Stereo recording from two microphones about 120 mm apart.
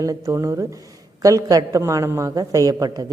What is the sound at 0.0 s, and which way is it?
A woman's voice, 25° right (ahead or behind).